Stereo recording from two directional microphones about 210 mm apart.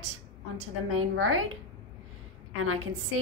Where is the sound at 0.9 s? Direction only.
80° right.